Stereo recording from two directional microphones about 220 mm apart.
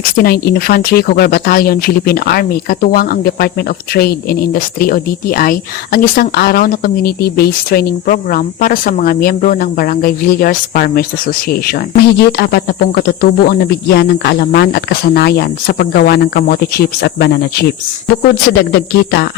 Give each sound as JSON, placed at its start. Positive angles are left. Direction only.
{"t": 0.2, "sound": "speech", "side_deg": 45}